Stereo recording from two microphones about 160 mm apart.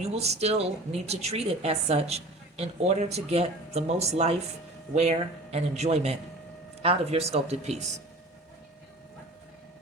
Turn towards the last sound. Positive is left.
turn(degrees=-45)  # may be behind; listen again after turning